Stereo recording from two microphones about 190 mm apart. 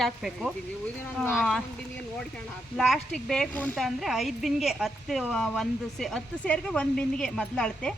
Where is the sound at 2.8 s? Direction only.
Centre (ahead or behind).